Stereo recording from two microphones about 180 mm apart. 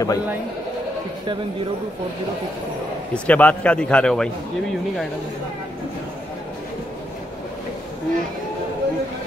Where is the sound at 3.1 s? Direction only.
10° left (ahead or behind).